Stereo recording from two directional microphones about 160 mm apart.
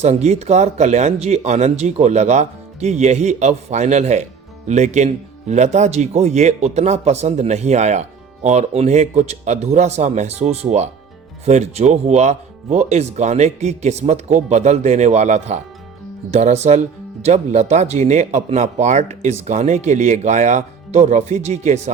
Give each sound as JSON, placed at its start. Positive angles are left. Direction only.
{"t": 0.0, "sound": "speech", "side_deg": -40}